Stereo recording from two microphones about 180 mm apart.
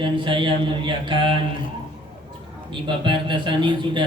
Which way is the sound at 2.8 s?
25° right (ahead or behind).